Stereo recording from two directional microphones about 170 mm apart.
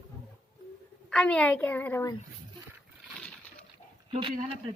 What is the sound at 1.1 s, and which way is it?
A woman's voice, 5° left (ahead or behind).